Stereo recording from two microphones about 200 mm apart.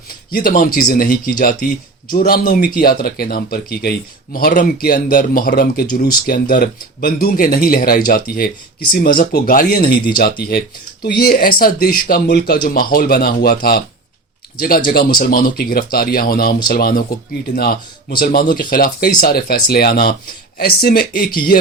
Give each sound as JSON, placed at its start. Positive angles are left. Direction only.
{"t": 0.3, "sound": "speech", "side_deg": 45}
{"t": 14.8, "sound": "speech", "side_deg": 50}